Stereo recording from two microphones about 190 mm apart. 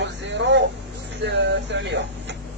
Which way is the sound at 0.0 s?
70° right (ahead or behind).